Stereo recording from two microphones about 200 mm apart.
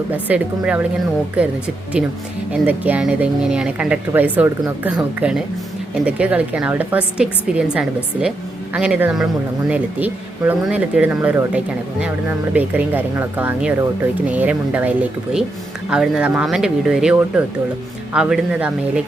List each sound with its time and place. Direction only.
0.1 s speech: 5° right (ahead or behind)